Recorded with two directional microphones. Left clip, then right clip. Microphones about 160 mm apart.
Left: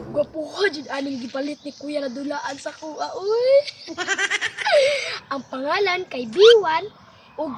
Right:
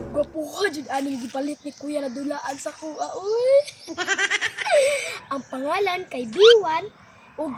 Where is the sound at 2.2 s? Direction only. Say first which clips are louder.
Left 1 dB; 30° left (ahead or behind).